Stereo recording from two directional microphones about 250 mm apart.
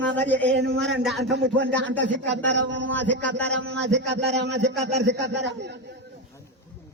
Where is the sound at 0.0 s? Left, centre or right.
Right.